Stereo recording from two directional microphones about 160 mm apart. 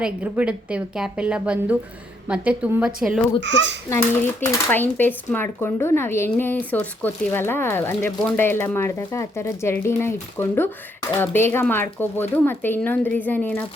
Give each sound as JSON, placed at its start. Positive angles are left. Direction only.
{"t": 0.0, "sound": "a woman's voice", "side_deg": -5}
{"t": 3.8, "sound": "speech", "side_deg": 15}